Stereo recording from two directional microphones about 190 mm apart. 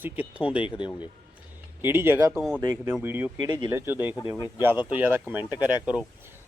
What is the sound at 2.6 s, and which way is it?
Speech, 15° right (ahead or behind).